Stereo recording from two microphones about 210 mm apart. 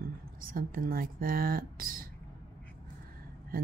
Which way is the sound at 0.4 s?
40° right (ahead or behind).